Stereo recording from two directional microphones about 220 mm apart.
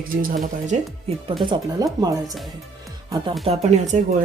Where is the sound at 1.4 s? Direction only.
20° right (ahead or behind).